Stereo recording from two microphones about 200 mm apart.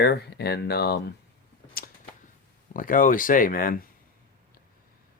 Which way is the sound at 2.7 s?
40° left (ahead or behind).